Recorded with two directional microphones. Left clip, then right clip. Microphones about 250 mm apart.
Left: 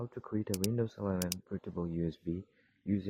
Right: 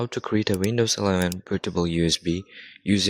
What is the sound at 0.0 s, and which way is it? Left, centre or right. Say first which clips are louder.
Speech: right 15 dB; right.